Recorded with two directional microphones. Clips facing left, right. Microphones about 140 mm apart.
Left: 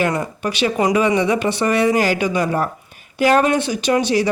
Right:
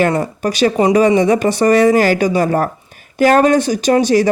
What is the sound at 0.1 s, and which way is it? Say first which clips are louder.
Speech: right 5 dB; 40° right (ahead or behind).